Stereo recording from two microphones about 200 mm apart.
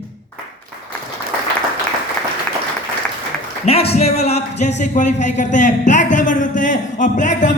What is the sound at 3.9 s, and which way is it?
A man's voice, 30° left (ahead or behind).